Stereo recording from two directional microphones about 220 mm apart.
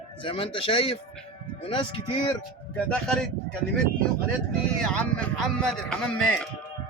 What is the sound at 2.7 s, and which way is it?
Speech, 5° left (ahead or behind).